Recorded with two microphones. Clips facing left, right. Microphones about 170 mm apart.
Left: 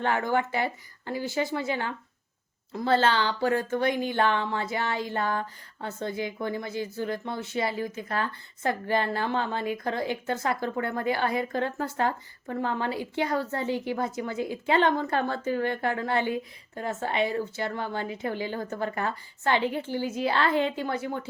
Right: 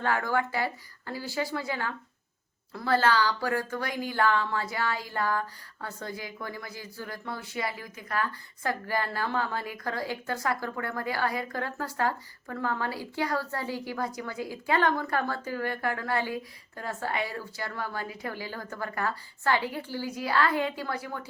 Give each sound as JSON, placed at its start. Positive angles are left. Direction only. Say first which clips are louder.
{"t": 0.0, "sound": "speech", "louder": "left 2 dB", "side_deg": 20}